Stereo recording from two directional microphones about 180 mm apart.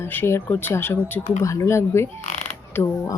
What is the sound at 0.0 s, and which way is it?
Speech, 10° left (ahead or behind).